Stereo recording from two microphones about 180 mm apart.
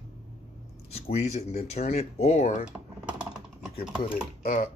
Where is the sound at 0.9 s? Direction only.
35° left (ahead or behind).